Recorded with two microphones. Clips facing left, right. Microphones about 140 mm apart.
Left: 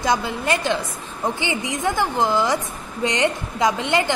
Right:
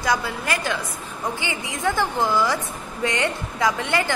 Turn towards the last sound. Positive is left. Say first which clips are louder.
# left 3 dB
turn(degrees=20)  # may be behind; listen again after turning